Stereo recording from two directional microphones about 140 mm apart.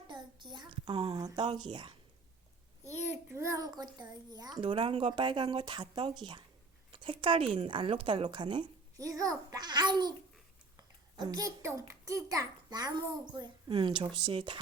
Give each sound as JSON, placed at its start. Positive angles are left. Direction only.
{"t": 0.5, "sound": "a sound", "side_deg": -35}
{"t": 1.1, "sound": "a child's voice", "side_deg": -30}
{"t": 3.2, "sound": "a child's voice", "side_deg": -20}